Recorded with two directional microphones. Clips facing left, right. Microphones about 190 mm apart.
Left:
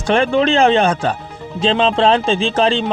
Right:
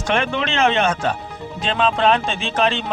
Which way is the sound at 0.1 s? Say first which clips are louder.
Left 8 dB; 35° left (ahead or behind).